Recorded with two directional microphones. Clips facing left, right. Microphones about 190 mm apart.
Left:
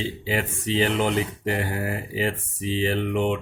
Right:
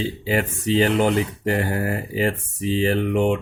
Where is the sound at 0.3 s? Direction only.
45° right (ahead or behind).